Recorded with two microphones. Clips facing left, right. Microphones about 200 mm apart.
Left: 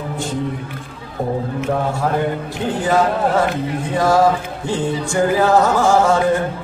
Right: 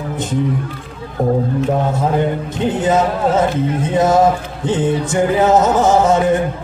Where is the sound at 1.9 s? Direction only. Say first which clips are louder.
Right 2 dB; 20° right (ahead or behind).